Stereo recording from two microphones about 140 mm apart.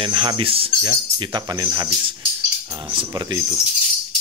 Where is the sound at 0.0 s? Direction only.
35° right (ahead or behind).